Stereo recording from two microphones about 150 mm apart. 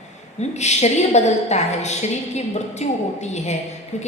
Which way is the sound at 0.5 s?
50° left (ahead or behind).